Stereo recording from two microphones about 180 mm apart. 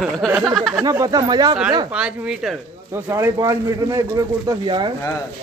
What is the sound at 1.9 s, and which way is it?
Speech, 5° right (ahead or behind).